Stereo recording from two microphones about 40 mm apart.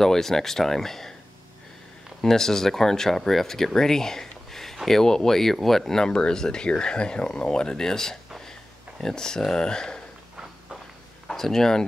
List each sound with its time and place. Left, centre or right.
0.0 s speech: centre
2.2 s speech: centre
8.5 s a sound: centre
11.2 s speech: centre